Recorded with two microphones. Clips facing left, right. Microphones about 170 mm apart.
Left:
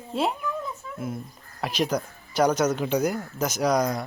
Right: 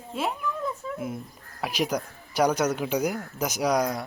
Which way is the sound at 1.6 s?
10° right (ahead or behind).